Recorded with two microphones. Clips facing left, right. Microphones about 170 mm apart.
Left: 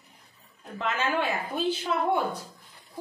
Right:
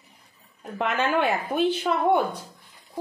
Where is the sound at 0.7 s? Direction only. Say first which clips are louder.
Right 4 dB; 65° right (ahead or behind).